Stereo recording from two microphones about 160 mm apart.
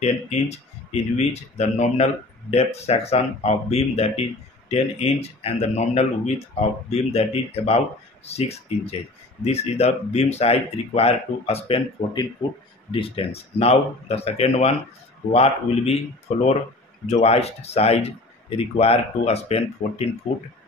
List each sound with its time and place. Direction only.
0.0 s speech: 45° left (ahead or behind)